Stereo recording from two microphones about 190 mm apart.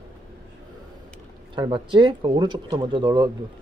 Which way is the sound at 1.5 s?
25° right (ahead or behind).